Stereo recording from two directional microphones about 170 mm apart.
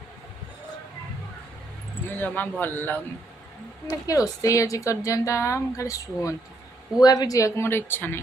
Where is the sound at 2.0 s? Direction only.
10° left (ahead or behind).